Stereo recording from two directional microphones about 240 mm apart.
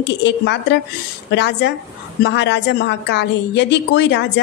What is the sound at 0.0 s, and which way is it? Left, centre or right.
A woman's voice, left.